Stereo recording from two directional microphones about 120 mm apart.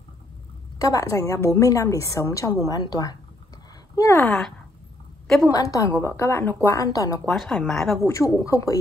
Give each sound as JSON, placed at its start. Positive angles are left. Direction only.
{"t": 0.7, "sound": "a woman's voice", "side_deg": 30}
{"t": 4.3, "sound": "speech", "side_deg": 5}
{"t": 5.5, "sound": "a woman's voice", "side_deg": 30}
{"t": 7.2, "sound": "speech", "side_deg": 5}
{"t": 8.1, "sound": "a woman's voice", "side_deg": 25}